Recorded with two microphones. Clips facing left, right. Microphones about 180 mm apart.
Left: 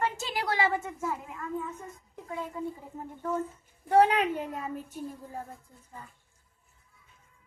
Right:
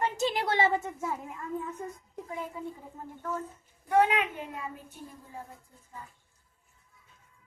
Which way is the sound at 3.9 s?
35° left (ahead or behind).